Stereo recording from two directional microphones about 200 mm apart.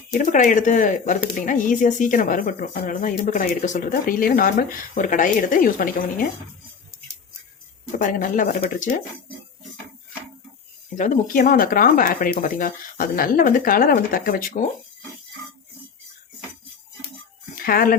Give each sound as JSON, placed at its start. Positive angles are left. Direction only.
{"t": 0.2, "sound": "a woman's voice", "side_deg": 40}
{"t": 7.9, "sound": "a woman's voice", "side_deg": 40}
{"t": 10.9, "sound": "speech", "side_deg": 40}
{"t": 17.5, "sound": "music", "side_deg": 45}